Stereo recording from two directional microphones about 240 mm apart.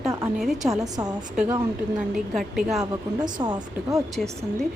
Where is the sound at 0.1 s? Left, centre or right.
Centre.